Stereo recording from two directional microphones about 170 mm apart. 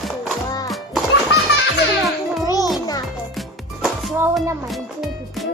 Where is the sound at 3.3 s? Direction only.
Centre (ahead or behind).